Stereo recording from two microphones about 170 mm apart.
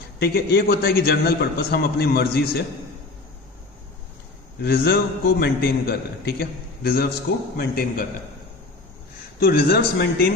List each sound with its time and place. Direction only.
0.2 s a man's voice: 70° left (ahead or behind)
4.6 s a man's voice: 65° left (ahead or behind)
9.4 s a man's voice: 65° left (ahead or behind)